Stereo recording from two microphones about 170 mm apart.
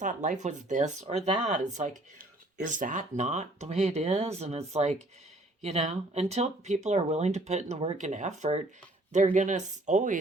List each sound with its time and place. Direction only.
0.0 s speech: 45° right (ahead or behind)